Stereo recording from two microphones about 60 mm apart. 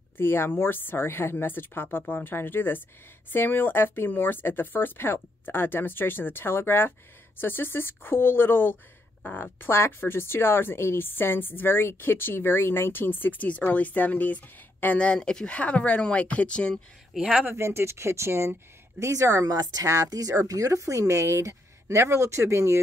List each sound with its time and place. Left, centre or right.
0.2 s speech: left; by 16.7 s centre
17.1 s speech: centre
17.5 s speech: right